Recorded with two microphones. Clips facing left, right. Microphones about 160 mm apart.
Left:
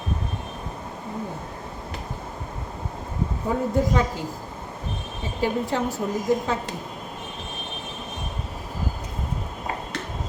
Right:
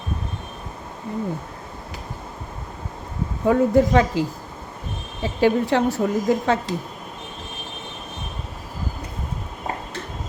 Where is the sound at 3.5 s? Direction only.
90° right.